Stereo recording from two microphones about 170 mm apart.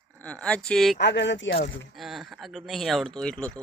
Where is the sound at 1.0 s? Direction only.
90° left.